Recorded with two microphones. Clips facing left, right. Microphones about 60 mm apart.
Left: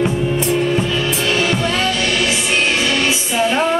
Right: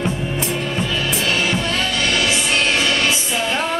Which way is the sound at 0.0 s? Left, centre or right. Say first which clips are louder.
Left 5 dB; centre.